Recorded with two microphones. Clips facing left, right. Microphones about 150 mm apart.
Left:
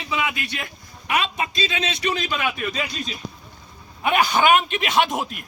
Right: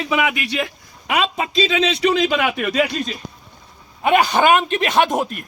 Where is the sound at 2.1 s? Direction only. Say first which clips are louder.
Right 7 dB; 90° right; by 3.0 s 75° right (ahead or behind).